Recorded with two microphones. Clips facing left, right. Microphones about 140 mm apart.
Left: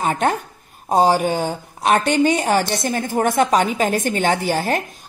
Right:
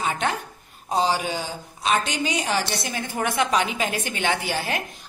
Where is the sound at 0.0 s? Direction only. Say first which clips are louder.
Left 6 dB; 45° left (ahead or behind).